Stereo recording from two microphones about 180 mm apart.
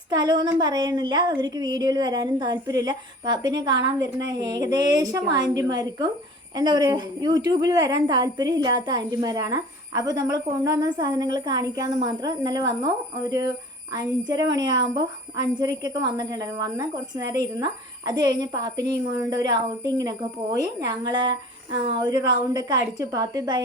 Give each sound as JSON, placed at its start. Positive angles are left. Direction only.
{"t": 0.1, "sound": "speech", "side_deg": -25}